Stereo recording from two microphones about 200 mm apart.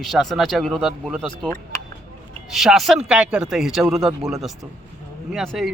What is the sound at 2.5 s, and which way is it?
A man's voice, centre (ahead or behind).